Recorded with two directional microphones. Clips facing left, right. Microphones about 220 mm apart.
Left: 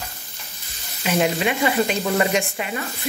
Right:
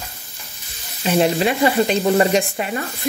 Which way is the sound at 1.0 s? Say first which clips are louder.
Right 4 dB; 30° right (ahead or behind).